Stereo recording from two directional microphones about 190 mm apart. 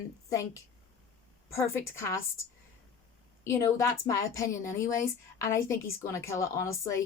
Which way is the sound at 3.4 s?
15° left (ahead or behind).